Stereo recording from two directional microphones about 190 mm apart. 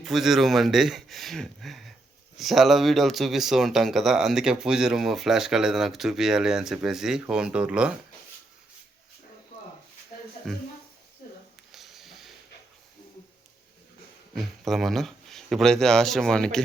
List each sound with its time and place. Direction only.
0.0 s speech: centre (ahead or behind)
11.7 s a sound: centre (ahead or behind)
14.3 s speech: centre (ahead or behind)